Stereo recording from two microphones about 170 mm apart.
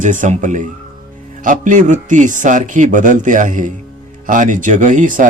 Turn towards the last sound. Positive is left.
turn(degrees=-50)  # may be behind; listen again after turning